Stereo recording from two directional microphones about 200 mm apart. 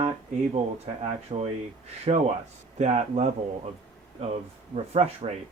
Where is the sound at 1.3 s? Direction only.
30° right (ahead or behind).